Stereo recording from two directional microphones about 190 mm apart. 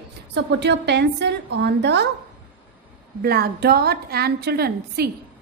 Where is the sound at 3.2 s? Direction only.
55° right (ahead or behind).